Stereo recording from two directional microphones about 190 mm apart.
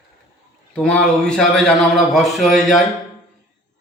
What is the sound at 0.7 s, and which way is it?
A man's voice, 5° left (ahead or behind).